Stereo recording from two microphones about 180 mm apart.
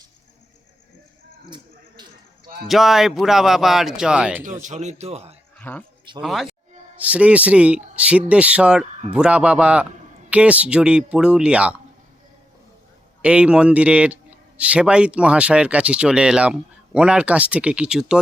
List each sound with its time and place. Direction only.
1.5 s a sound: 25° right (ahead or behind)
2.6 s speech: centre (ahead or behind)
4.6 s a man's voice: 40° right (ahead or behind)
5.5 s speech: 10° left (ahead or behind)
13.2 s speech: 5° right (ahead or behind)